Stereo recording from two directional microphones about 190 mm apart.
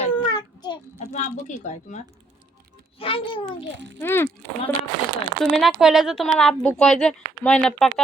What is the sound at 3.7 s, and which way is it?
Speech, 70° right (ahead or behind).